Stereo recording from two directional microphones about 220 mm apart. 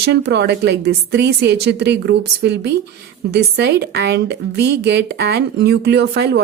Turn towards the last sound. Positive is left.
turn(degrees=-50)  # may be behind; listen again after turning